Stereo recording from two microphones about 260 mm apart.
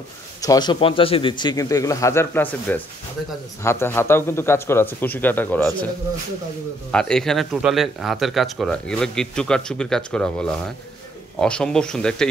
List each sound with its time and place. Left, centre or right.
0.4 s a man's voice: centre
6.9 s speech: centre